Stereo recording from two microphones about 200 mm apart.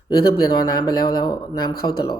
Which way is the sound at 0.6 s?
20° left (ahead or behind).